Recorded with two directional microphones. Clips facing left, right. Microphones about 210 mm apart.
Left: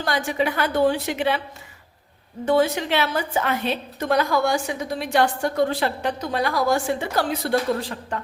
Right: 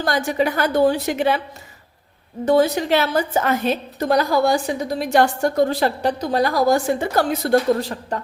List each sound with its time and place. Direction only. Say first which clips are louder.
0.0 s a woman's voice: right 3 dB; 40° right (ahead or behind)
2.4 s a woman's voice: right 3 dB; 40° right (ahead or behind)